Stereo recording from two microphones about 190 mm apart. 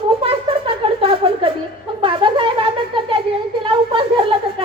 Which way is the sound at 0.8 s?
30° right (ahead or behind).